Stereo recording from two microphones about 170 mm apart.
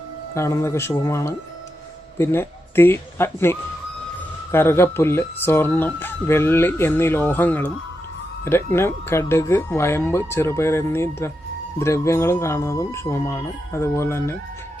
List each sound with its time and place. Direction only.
0.3 s speech: 15° left (ahead or behind)